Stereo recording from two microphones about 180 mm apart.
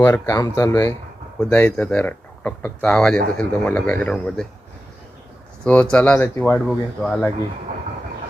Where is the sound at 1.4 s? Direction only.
5° left (ahead or behind).